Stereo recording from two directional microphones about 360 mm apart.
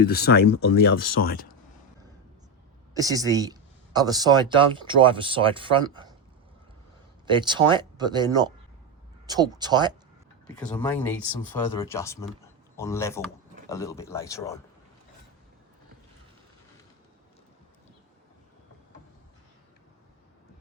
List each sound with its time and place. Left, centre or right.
0.0 s speech: left
2.9 s speech: centre
7.3 s speech: centre
10.4 s speech: centre